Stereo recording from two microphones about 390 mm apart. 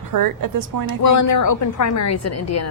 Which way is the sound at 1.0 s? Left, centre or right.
Left.